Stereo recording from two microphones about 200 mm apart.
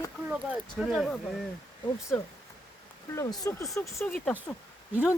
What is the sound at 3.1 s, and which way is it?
Speech, 15° left (ahead or behind).